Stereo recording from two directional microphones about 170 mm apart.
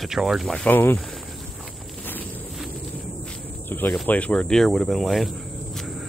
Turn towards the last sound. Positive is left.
turn(degrees=0)  # may be behind; listen again after turning